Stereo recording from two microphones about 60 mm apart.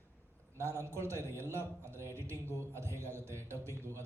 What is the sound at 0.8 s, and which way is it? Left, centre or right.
A man's voice, right.